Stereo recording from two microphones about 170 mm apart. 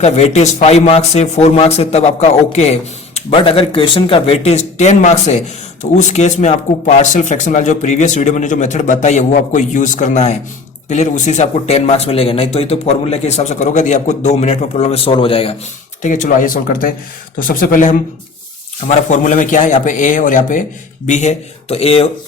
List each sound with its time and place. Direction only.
0.0 s speech: 40° left (ahead or behind)
16.0 s speech: 50° left (ahead or behind)